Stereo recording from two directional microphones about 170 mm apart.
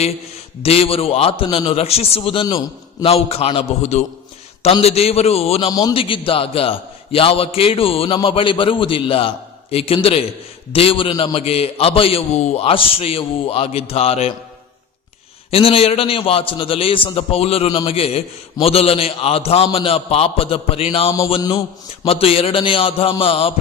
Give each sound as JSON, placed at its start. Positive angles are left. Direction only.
{"t": 0.6, "sound": "a man's voice", "side_deg": 35}
{"t": 15.4, "sound": "a man's voice", "side_deg": 35}